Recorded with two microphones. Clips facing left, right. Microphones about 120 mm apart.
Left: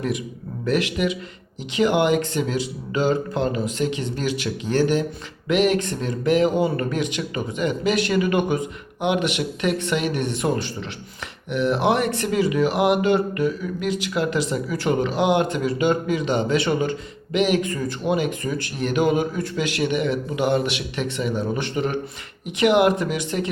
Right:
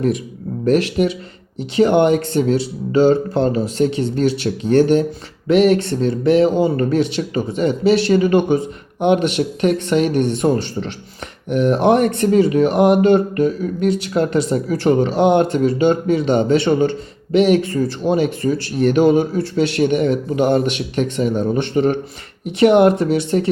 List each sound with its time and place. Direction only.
0.6 s speech: 35° right (ahead or behind)